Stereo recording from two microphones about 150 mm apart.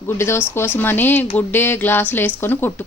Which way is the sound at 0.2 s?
15° left (ahead or behind).